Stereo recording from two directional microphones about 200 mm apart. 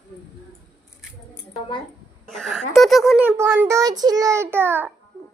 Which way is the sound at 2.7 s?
Centre (ahead or behind).